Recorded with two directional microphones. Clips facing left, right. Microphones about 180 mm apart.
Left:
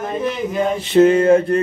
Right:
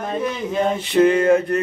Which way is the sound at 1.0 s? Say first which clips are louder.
Left 3 dB; 30° left (ahead or behind).